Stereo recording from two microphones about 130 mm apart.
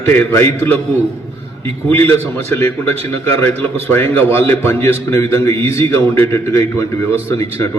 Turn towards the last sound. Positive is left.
turn(degrees=20)  # may be behind; listen again after turning